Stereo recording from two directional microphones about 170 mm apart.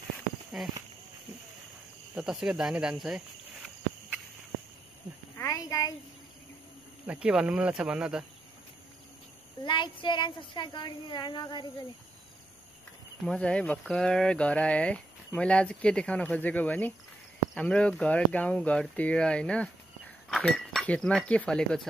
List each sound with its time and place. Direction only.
0.6 s speech: centre (ahead or behind)
2.1 s cricket: centre (ahead or behind)
5.4 s speech: 20° left (ahead or behind)
7.1 s speech: 5° right (ahead or behind)
9.7 s speech: 25° left (ahead or behind)
13.2 s speech: 5° left (ahead or behind)